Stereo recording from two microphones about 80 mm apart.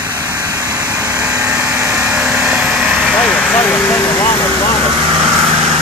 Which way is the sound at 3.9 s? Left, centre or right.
Left.